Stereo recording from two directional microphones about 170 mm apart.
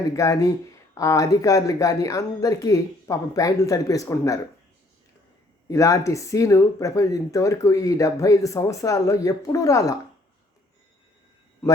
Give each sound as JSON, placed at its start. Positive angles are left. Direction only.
{"t": 0.1, "sound": "speech", "side_deg": 20}
{"t": 5.6, "sound": "speech", "side_deg": 20}